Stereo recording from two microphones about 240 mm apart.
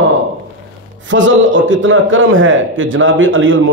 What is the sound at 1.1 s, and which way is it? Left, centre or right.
A man's voice, right.